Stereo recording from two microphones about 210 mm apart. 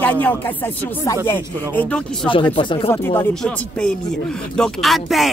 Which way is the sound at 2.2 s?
25° left (ahead or behind).